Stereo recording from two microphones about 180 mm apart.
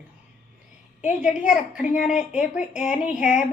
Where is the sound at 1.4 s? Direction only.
5° right (ahead or behind).